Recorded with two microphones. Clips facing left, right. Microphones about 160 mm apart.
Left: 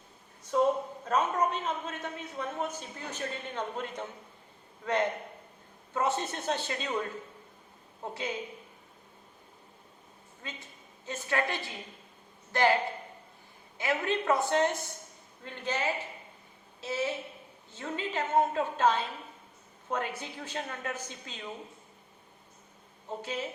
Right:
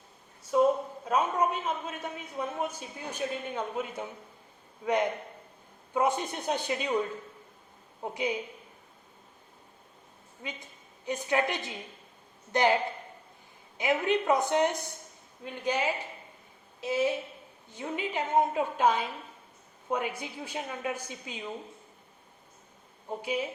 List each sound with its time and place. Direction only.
0.5 s a sound: 5° right (ahead or behind)
4.9 s speech: 15° right (ahead or behind)
8.0 s speech: 15° right (ahead or behind)
10.4 s a woman's voice: 15° right (ahead or behind)
13.7 s speech: 15° right (ahead or behind)
23.0 s speech: 10° right (ahead or behind)